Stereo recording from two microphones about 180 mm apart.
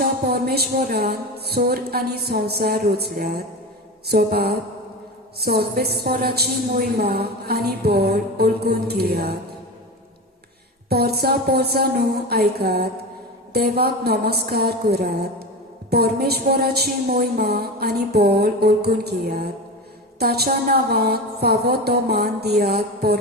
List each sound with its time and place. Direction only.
0.0 s a woman's voice: 60° right (ahead or behind)
10.8 s a woman's voice: 60° right (ahead or behind)